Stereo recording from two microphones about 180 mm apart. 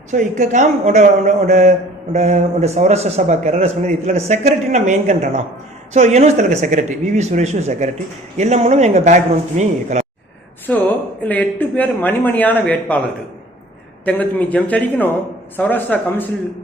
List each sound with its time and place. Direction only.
0.1 s a man's voice: 40° right (ahead or behind)
10.7 s speech: 10° left (ahead or behind)
14.0 s speech: 10° left (ahead or behind)